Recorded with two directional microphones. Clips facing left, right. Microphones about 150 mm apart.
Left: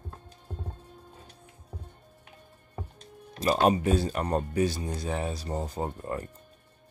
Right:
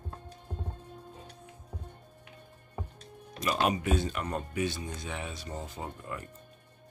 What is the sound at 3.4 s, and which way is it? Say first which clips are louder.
Speech: left 6 dB; 35° left (ahead or behind).